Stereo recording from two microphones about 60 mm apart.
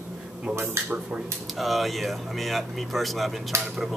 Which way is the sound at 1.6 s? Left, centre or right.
Centre.